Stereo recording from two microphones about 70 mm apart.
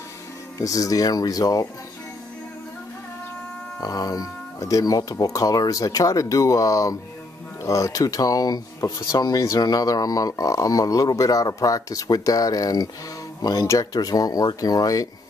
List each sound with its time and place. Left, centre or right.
0.6 s speech: left
3.8 s speech: left
9.6 s speech: left
13.7 s speech: left